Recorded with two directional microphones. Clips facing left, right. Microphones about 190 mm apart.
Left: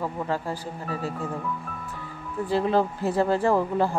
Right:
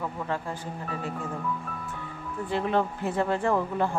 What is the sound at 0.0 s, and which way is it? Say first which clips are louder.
Speech: left 3 dB; 35° left (ahead or behind).